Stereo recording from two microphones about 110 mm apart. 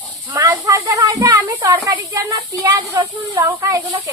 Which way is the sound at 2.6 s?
35° right (ahead or behind).